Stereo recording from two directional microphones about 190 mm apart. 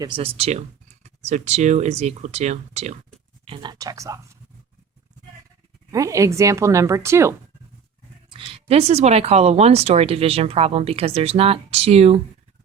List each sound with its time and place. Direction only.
0.0 s speech: 30° right (ahead or behind)
3.4 s speech: 25° right (ahead or behind)
5.9 s a woman's voice: 15° right (ahead or behind)
8.3 s speech: 30° right (ahead or behind)